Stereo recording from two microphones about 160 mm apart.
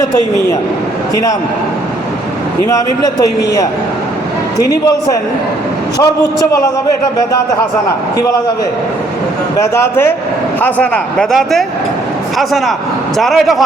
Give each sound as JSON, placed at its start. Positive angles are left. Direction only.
{"t": 0.0, "sound": "a man's voice", "side_deg": 20}
{"t": 2.6, "sound": "a man's voice", "side_deg": 20}
{"t": 9.6, "sound": "a man's voice", "side_deg": 15}